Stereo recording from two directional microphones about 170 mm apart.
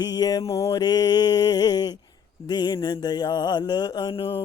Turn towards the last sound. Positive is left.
turn(degrees=30)  # may be behind; listen again after turning